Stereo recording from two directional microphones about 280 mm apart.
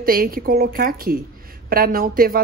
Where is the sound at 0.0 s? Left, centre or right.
Right.